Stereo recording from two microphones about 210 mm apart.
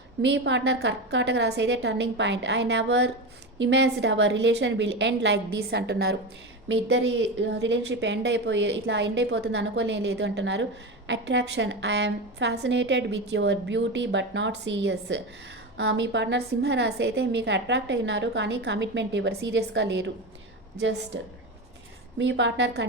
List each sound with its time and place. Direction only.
0.2 s a woman's voice: 60° right (ahead or behind)
21.1 s a woman's voice: 60° right (ahead or behind)